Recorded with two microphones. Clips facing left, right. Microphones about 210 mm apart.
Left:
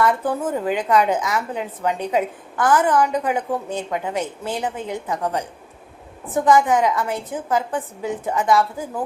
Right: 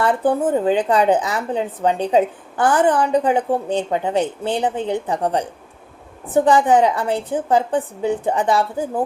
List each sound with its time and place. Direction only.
0.0 s speech: 30° right (ahead or behind)